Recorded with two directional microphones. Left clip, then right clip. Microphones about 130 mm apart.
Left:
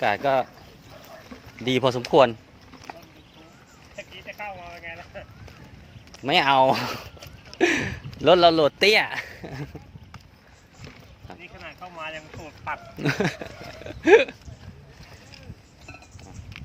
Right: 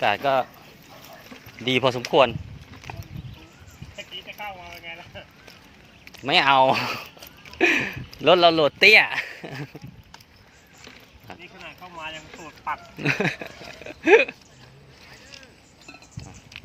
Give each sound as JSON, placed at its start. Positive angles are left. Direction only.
{"t": 0.0, "sound": "speech", "side_deg": 15}
{"t": 1.6, "sound": "speech", "side_deg": 25}
{"t": 2.0, "sound": "speech", "side_deg": 45}
{"t": 2.9, "sound": "clip-clop", "side_deg": 5}
{"t": 3.9, "sound": "a sound", "side_deg": 10}
{"t": 6.2, "sound": "speech", "side_deg": 25}
{"t": 7.5, "sound": "a sound", "side_deg": 25}
{"t": 8.2, "sound": "speech", "side_deg": 25}
{"t": 11.3, "sound": "a sound", "side_deg": 5}
{"t": 12.4, "sound": "speech", "side_deg": 10}
{"t": 13.0, "sound": "speech", "side_deg": 25}